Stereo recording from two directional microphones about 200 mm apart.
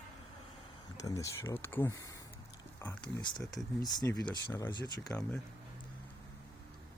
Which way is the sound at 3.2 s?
20° left (ahead or behind).